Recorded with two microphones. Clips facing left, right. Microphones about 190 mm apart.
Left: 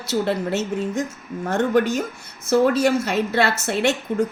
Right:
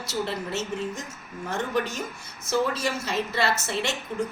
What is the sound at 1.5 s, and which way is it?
A woman's voice, 60° left (ahead or behind).